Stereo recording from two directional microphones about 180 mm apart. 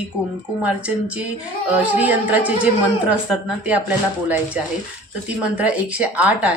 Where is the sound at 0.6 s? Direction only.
5° right (ahead or behind).